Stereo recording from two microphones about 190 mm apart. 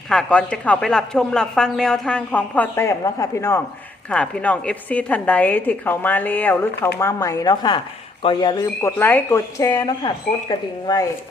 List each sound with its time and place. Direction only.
0.1 s a woman's voice: 5° left (ahead or behind); by 11.0 s 20° left (ahead or behind)